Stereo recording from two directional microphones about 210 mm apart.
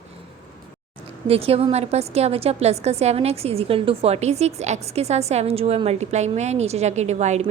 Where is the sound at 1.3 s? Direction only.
30° right (ahead or behind).